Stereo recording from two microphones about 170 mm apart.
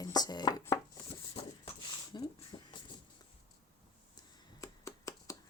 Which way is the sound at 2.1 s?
25° left (ahead or behind).